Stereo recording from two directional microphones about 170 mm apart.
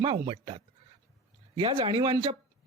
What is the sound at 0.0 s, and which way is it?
Speech, 30° right (ahead or behind).